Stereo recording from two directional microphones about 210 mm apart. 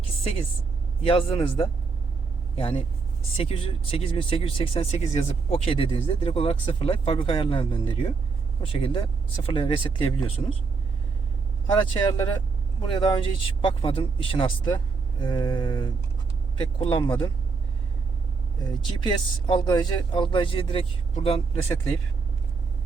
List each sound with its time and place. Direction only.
0.0 s vehicle: 25° left (ahead or behind)
1.0 s speech: 25° left (ahead or behind)
11.6 s speech: 20° left (ahead or behind)
18.6 s speech: 20° left (ahead or behind)